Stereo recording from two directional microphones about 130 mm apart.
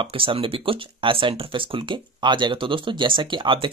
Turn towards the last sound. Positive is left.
turn(degrees=-40)  # may be behind; listen again after turning